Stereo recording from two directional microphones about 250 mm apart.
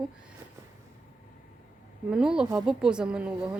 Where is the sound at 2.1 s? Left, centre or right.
Centre.